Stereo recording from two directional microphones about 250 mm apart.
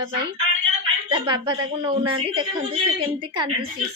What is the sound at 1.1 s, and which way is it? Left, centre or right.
A woman's voice, centre.